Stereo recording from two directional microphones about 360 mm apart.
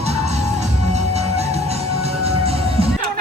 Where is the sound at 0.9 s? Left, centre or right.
Centre.